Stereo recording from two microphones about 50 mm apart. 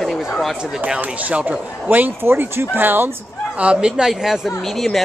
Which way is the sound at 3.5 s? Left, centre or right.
Right.